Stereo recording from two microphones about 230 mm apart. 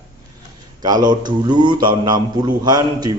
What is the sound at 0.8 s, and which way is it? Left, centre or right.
A man's voice, centre.